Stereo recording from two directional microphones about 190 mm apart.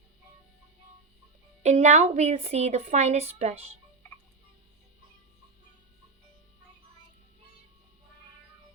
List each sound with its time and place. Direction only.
1.6 s a woman's voice: 35° right (ahead or behind)